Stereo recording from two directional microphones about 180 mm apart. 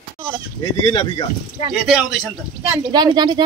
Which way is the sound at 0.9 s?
30° left (ahead or behind).